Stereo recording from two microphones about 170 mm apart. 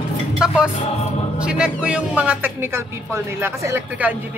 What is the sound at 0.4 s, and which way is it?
Music, 5° right (ahead or behind).